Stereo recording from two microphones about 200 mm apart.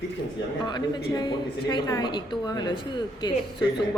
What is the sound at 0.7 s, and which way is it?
A woman's voice, 20° left (ahead or behind).